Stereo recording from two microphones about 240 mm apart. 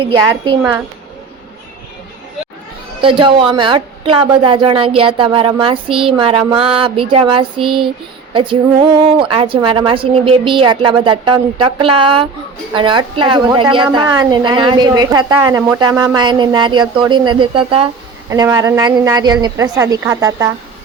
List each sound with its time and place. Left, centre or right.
0.0 s a woman's voice: right
3.0 s a woman's voice: right